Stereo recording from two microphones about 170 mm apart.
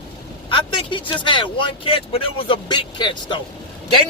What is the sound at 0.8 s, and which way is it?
A man's voice, 30° left (ahead or behind).